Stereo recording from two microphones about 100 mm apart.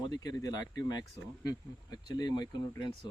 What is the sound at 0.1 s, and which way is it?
Speech, 40° left (ahead or behind).